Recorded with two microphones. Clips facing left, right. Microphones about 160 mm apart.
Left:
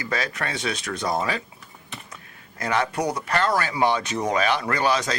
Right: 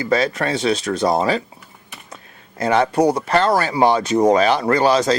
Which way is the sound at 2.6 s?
30° right (ahead or behind).